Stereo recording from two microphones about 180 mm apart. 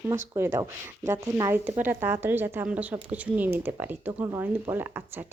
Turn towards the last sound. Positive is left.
turn(degrees=-10)  # may be behind; listen again after turning